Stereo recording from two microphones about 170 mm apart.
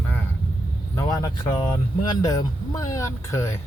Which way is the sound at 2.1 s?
25° left (ahead or behind).